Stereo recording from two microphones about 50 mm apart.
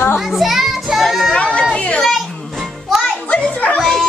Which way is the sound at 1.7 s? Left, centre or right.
Left.